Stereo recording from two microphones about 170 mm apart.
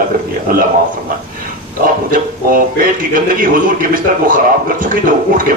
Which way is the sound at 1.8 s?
55° right (ahead or behind).